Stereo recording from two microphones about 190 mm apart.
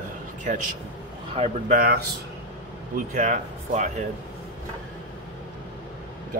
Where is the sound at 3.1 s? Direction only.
40° right (ahead or behind).